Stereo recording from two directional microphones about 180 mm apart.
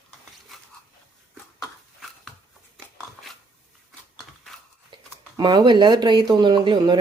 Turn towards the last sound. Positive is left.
turn(degrees=-25)  # may be behind; listen again after turning